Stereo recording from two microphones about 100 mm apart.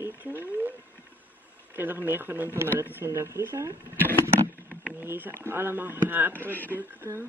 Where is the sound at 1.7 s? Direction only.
20° right (ahead or behind).